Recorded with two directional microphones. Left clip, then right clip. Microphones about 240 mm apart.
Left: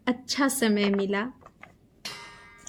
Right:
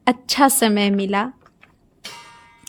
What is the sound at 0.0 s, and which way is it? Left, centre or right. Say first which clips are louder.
A woman's voice: right 11 dB; right.